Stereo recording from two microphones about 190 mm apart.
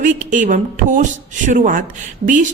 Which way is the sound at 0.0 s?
40° right (ahead or behind).